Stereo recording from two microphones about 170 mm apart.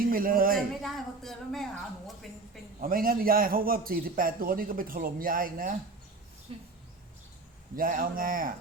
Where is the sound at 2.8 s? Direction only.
60° right (ahead or behind).